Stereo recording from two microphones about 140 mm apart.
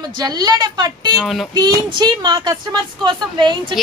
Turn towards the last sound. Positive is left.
turn(degrees=-35)  # may be behind; listen again after turning